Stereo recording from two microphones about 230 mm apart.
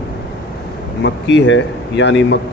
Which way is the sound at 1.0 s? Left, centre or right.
Left.